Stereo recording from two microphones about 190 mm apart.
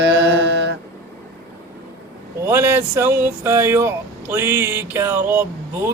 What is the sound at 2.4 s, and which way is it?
Speech, 10° right (ahead or behind).